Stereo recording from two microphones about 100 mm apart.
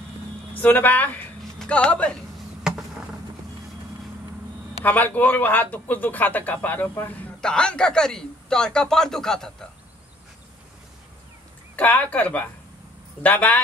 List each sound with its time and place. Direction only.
0.6 s a man's voice: 15° left (ahead or behind)
4.8 s a man's voice: 15° left (ahead or behind)
11.7 s a man's voice: 15° left (ahead or behind)